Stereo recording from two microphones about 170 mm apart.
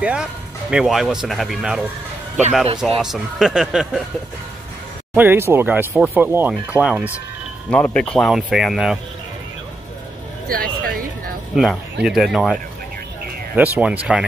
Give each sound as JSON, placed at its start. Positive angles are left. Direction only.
{"t": 0.0, "sound": "speech", "side_deg": -5}
{"t": 3.0, "sound": "speech", "side_deg": 0}
{"t": 5.1, "sound": "speech", "side_deg": -10}
{"t": 7.7, "sound": "speech", "side_deg": 5}
{"t": 10.5, "sound": "speech", "side_deg": -55}
{"t": 11.5, "sound": "speech", "side_deg": 0}
{"t": 13.6, "sound": "speech", "side_deg": -10}